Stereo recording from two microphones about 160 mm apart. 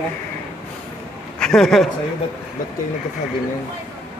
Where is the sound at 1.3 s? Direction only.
5° left (ahead or behind).